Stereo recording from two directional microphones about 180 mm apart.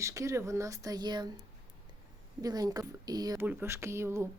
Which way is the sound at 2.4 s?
20° right (ahead or behind).